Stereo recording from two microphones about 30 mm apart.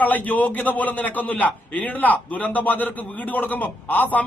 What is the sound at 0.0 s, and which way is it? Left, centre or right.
A man's voice, left.